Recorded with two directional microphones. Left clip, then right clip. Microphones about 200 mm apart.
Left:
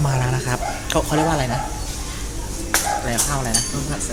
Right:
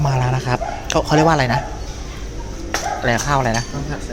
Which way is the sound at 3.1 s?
30° right (ahead or behind).